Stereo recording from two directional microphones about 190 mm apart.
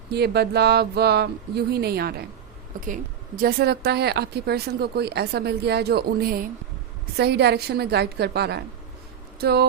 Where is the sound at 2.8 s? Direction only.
45° right (ahead or behind).